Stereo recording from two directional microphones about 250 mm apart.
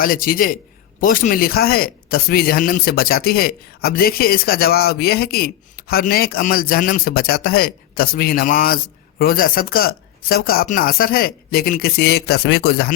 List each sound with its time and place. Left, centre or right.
0.0 s speech: left